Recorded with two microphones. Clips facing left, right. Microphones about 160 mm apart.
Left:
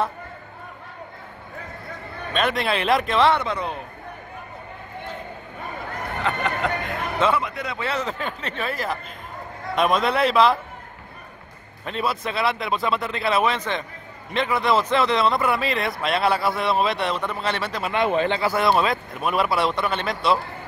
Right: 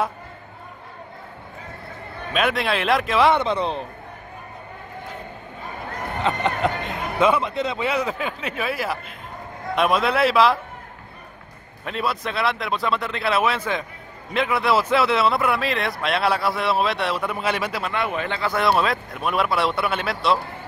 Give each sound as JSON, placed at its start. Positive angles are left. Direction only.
{"t": 2.3, "sound": "a man's voice", "side_deg": -5}
{"t": 3.3, "sound": "a man's voice", "side_deg": -20}
{"t": 6.2, "sound": "chatter", "side_deg": -20}
{"t": 7.4, "sound": "a man's voice", "side_deg": -25}
{"t": 11.8, "sound": "a man's voice", "side_deg": 0}
{"t": 17.9, "sound": "a man's voice", "side_deg": 25}
{"t": 18.4, "sound": "a man's voice", "side_deg": 5}